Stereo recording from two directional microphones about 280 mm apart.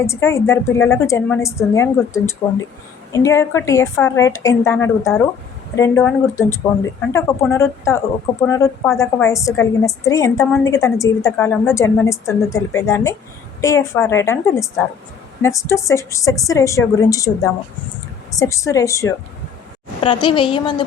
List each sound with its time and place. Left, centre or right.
0.0 s a woman's voice: centre